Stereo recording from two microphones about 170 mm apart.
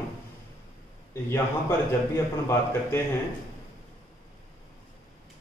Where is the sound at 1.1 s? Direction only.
15° left (ahead or behind).